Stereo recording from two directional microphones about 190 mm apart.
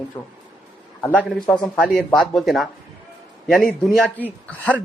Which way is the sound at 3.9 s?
5° left (ahead or behind).